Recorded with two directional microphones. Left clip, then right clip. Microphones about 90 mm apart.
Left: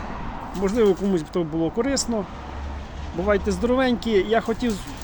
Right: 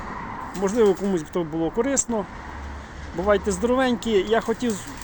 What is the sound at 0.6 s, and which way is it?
Speech, 15° left (ahead or behind).